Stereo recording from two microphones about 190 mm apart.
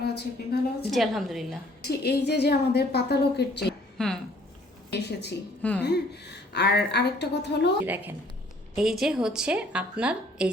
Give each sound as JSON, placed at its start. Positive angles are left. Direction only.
{"t": 0.0, "sound": "a woman's voice", "side_deg": 60}
{"t": 0.9, "sound": "a woman's voice", "side_deg": 0}
{"t": 1.8, "sound": "a woman's voice", "side_deg": 60}
{"t": 3.9, "sound": "speech", "side_deg": 5}
{"t": 4.9, "sound": "a woman's voice", "side_deg": 60}
{"t": 7.9, "sound": "a woman's voice", "side_deg": -10}